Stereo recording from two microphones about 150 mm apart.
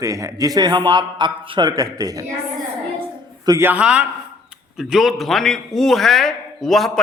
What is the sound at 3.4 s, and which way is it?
Speech, 25° right (ahead or behind).